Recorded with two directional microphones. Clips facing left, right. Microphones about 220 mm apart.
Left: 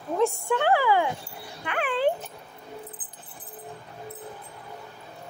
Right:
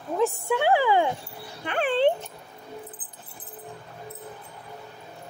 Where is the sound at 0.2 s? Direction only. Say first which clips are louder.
Even; 10° right (ahead or behind).